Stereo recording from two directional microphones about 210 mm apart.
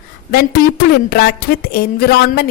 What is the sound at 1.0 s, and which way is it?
A woman's voice, 45° left (ahead or behind).